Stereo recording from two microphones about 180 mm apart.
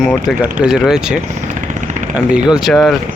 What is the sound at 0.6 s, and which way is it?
Speech, 5° right (ahead or behind).